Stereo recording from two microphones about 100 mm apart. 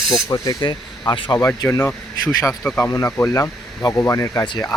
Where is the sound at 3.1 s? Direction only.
20° left (ahead or behind).